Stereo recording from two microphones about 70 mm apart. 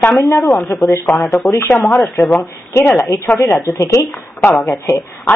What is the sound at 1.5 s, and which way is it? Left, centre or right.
Speech, left.